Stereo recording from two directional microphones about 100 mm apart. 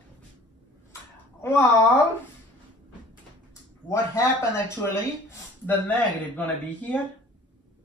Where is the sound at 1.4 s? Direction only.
20° left (ahead or behind).